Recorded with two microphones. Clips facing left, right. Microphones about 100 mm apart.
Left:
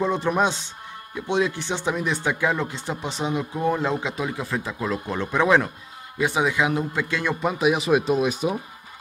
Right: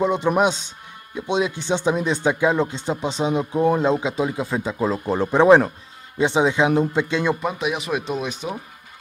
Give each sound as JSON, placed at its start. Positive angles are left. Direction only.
{"t": 0.0, "sound": "speech", "side_deg": -20}
{"t": 7.4, "sound": "speech", "side_deg": 0}